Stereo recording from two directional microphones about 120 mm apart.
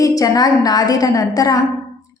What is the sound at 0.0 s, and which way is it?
A woman's voice, 30° left (ahead or behind).